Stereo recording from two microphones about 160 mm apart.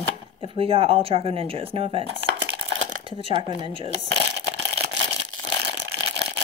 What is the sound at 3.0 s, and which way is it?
Speech, 35° right (ahead or behind).